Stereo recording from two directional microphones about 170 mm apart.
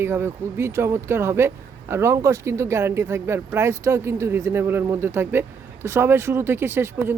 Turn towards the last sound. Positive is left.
turn(degrees=-15)  # may be behind; listen again after turning